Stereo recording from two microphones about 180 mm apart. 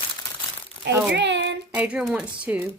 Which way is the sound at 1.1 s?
80° right.